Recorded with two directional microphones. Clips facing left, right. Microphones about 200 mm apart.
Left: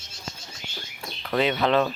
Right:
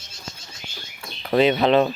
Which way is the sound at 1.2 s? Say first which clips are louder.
Right 6 dB; 20° right (ahead or behind).